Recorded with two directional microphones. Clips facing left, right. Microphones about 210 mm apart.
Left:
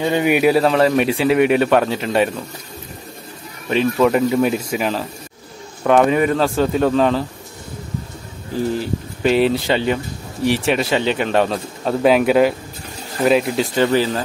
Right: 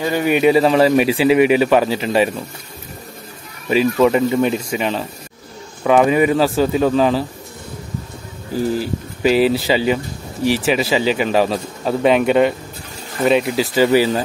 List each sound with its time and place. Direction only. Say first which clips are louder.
0.0 s a man's voice: left 1 dB; 20° left (ahead or behind)
0.3 s speech: right 3 dB; 5° left (ahead or behind)
3.6 s speech: right 2 dB; 5° right (ahead or behind)
8.7 s speech: right 1 dB; 5° right (ahead or behind)